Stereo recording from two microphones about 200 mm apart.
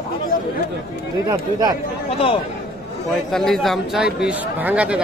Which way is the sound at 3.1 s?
Centre (ahead or behind).